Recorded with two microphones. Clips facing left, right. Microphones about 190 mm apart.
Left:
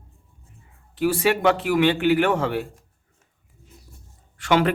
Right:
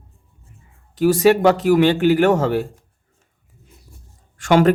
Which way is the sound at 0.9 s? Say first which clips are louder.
Right 7 dB; 40° right (ahead or behind).